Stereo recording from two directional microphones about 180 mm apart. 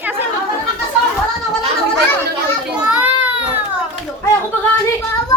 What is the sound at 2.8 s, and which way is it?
Children playing, 5° right (ahead or behind).